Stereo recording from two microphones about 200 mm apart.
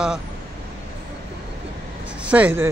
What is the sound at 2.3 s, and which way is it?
Speech, 10° right (ahead or behind).